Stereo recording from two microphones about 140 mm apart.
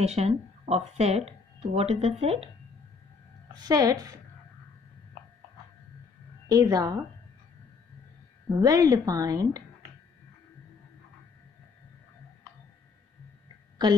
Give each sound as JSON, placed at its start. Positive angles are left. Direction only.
{"t": 0.0, "sound": "speech", "side_deg": -50}
{"t": 3.5, "sound": "a woman's voice", "side_deg": -25}
{"t": 6.5, "sound": "a woman's voice", "side_deg": -25}
{"t": 8.5, "sound": "a woman's voice", "side_deg": -25}